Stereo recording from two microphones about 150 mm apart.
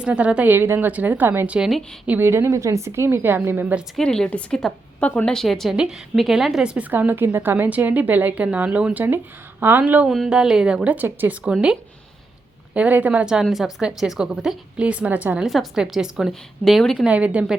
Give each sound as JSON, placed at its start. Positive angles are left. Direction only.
{"t": 0.0, "sound": "a woman's voice", "side_deg": -10}
{"t": 2.1, "sound": "a woman's voice", "side_deg": -15}
{"t": 3.9, "sound": "a woman's voice", "side_deg": 5}